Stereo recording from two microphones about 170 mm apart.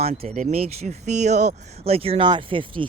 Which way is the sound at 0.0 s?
40° right (ahead or behind).